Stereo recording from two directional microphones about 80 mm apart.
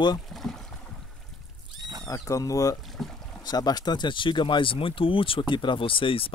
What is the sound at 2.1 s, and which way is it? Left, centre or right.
Speech, left.